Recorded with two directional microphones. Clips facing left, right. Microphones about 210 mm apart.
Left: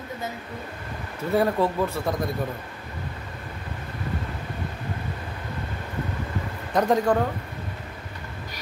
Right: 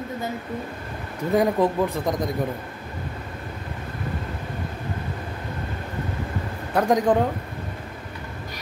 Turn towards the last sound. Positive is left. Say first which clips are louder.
# right 1 dB
turn(degrees=-15)  # may be behind; listen again after turning